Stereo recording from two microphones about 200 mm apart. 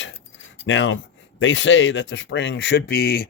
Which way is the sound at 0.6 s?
70° left (ahead or behind).